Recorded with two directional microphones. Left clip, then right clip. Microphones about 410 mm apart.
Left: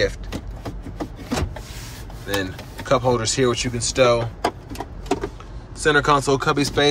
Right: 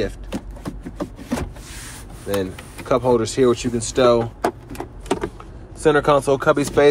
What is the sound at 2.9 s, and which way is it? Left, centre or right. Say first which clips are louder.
Speech: right 1 dB; centre.